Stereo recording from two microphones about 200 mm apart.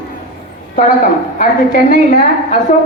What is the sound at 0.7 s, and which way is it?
A woman's voice, 40° left (ahead or behind).